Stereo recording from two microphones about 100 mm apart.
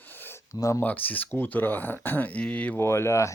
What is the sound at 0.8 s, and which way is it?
Speech, 15° left (ahead or behind).